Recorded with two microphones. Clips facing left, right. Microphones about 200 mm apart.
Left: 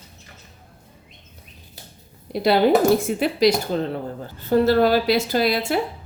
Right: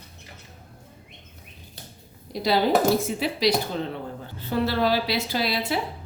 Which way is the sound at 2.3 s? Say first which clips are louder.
Left 5 dB; 60° left (ahead or behind).